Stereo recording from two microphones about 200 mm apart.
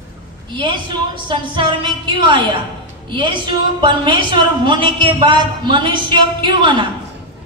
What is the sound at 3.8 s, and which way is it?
A woman's voice, 25° right (ahead or behind).